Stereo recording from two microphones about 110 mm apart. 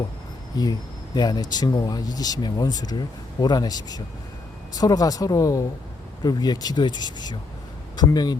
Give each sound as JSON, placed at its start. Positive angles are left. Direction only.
{"t": 0.5, "sound": "speech", "side_deg": 35}